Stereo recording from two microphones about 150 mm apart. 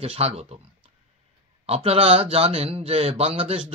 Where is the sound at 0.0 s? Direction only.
45° right (ahead or behind).